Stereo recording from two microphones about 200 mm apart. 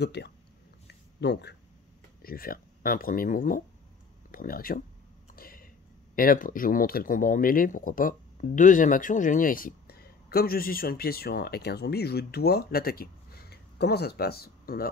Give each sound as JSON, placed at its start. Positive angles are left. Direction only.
{"t": 0.0, "sound": "speech", "side_deg": 55}
{"t": 5.3, "sound": "a sound", "side_deg": 45}
{"t": 6.1, "sound": "speech", "side_deg": 45}